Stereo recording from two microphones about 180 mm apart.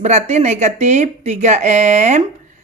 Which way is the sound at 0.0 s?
40° right (ahead or behind).